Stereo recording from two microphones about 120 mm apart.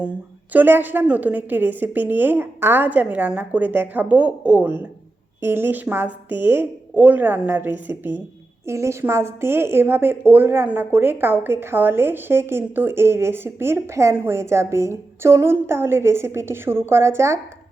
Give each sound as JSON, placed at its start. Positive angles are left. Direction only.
{"t": 0.5, "sound": "a woman's voice", "side_deg": -15}